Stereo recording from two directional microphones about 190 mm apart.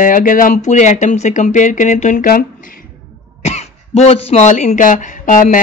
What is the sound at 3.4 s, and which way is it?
A woman's voice, 35° left (ahead or behind).